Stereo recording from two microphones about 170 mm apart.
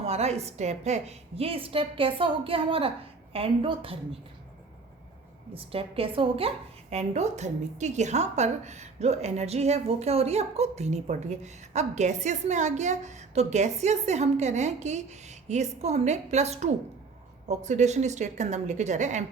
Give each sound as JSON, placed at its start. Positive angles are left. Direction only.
{"t": 0.0, "sound": "a woman's voice", "side_deg": -40}
{"t": 5.5, "sound": "a woman's voice", "side_deg": -35}